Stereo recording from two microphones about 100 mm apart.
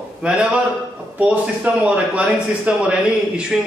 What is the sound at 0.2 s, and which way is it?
A man's voice, 10° right (ahead or behind).